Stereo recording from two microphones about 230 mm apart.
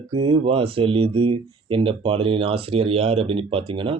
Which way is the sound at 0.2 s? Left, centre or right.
Right.